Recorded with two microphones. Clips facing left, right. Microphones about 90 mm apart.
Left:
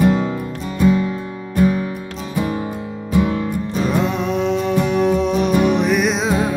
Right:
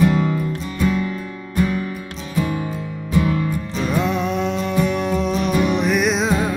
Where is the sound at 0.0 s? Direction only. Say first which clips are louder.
Left 1 dB; 25° left (ahead or behind).